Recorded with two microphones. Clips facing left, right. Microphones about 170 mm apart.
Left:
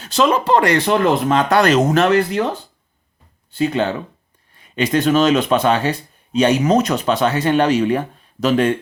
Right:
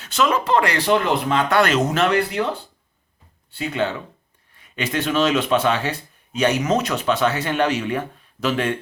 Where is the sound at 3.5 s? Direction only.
40° left (ahead or behind).